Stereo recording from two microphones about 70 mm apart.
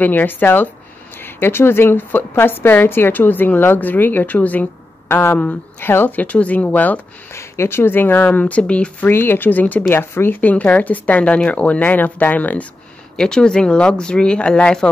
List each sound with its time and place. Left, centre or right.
0.0 s a woman's voice: left
7.3 s a woman's voice: left; by 9.1 s centre
9.1 s a woman's voice: left
13.1 s speech: centre